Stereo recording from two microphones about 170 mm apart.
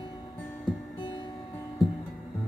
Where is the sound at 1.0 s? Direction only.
30° left (ahead or behind).